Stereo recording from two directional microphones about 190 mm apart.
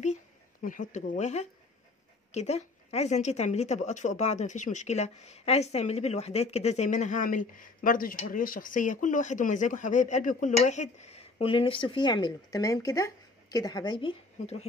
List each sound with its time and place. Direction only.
0.7 s speech: 40° left (ahead or behind)